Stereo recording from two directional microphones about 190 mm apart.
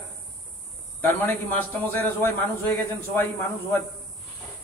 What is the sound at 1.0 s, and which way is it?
A man's voice, 10° left (ahead or behind).